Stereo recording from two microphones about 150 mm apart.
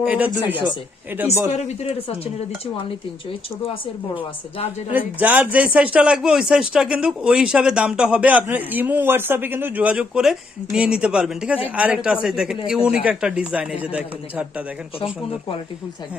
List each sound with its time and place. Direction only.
0.0 s speech: 10° right (ahead or behind)
1.5 s speech: 45° left (ahead or behind)
4.1 s a woman's voice: 40° left (ahead or behind)
4.9 s speech: 10° right (ahead or behind)
15.0 s a woman's voice: 40° left (ahead or behind)